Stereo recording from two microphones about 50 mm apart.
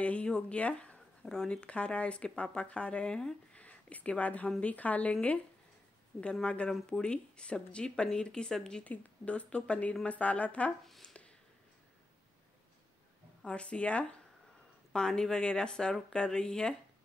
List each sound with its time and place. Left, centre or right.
0.0 s speech: left
1.2 s speech: centre
3.5 s a sound: left
4.6 s speech: left
6.4 s speech: left
8.8 s speech: left
10.9 s speech: centre
13.5 s speech: left